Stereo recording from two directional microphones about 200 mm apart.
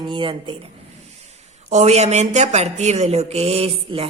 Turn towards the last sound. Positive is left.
turn(degrees=-30)  # may be behind; listen again after turning